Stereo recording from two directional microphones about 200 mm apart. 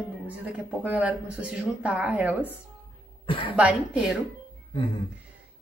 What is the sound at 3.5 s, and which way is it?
Speech, 5° right (ahead or behind).